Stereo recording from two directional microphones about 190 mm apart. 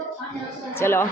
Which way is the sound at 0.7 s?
10° left (ahead or behind).